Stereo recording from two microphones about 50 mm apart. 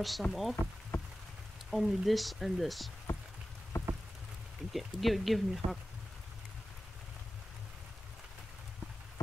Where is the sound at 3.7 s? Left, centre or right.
Left.